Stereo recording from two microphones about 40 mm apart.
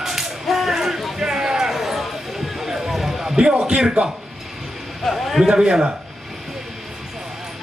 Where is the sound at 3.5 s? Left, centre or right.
Right.